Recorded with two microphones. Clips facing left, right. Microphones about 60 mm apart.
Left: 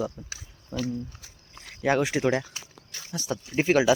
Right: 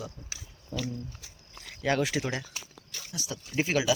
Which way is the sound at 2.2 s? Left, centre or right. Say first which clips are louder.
Left 9 dB; left.